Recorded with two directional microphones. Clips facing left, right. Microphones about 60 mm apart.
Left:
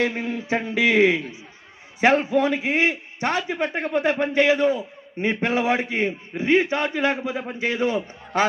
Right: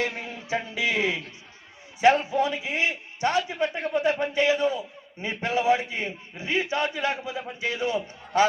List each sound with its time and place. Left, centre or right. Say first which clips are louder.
0.1 s a man's voice: left 5 dB; left
3.6 s a man's voice: left 2 dB; left